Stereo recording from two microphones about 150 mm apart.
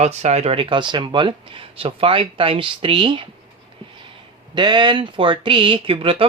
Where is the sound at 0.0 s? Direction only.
50° right (ahead or behind); by 3.2 s 35° right (ahead or behind).